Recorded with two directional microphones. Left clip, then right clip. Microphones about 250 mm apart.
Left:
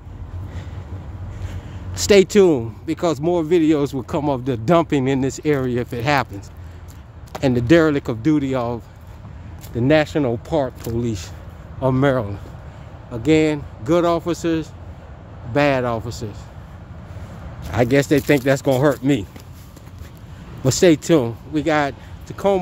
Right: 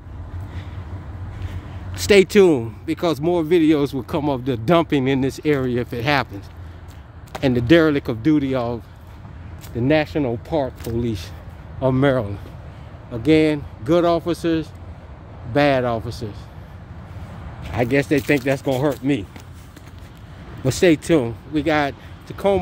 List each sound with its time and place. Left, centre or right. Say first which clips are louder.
1.5 s speech: left 1 dB; centre
9.8 s speech: left 2 dB; centre
17.7 s speech: left 2 dB; centre
20.6 s speech: left 2 dB; centre